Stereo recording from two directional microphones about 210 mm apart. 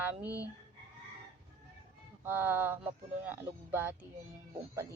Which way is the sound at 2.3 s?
10° right (ahead or behind).